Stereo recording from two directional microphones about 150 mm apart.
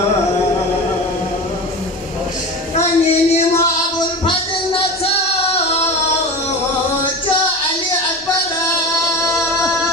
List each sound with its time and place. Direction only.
2.7 s child singing: 45° left (ahead or behind)
4.3 s music: 35° left (ahead or behind)